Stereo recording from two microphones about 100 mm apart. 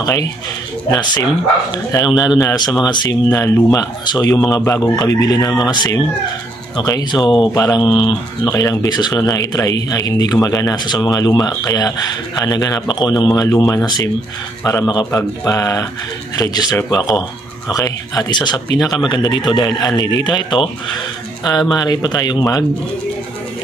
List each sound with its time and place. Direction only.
0.0 s a man's voice: 30° left (ahead or behind)
0.9 s a man's voice: 45° left (ahead or behind)
3.3 s a man's voice: 30° left (ahead or behind)
4.0 s a man's voice: 45° left (ahead or behind)
8.5 s a man's voice: 40° left (ahead or behind)
18.3 s speech: 45° left (ahead or behind)
21.5 s a man's voice: 40° left (ahead or behind)